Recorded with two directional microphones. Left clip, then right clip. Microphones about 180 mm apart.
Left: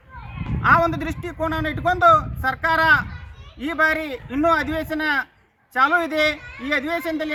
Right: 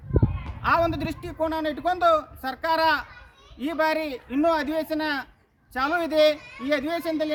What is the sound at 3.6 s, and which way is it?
A man's voice, 20° right (ahead or behind).